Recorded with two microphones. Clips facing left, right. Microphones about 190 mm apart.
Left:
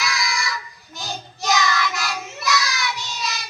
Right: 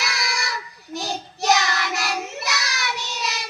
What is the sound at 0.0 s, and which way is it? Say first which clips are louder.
Child singing: left 2 dB; 70° right (ahead or behind).